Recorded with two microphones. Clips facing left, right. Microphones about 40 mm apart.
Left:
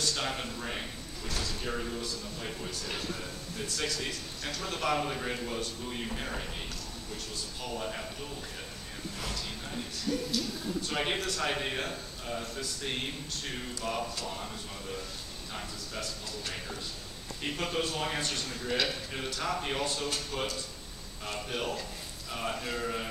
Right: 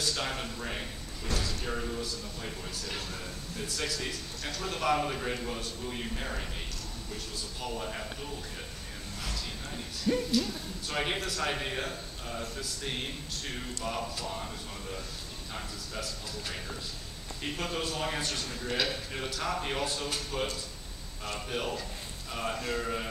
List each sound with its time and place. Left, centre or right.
0.0 s speech: centre
7.6 s speech: centre
9.2 s speech: centre
10.1 s a sound: right
10.9 s speech: centre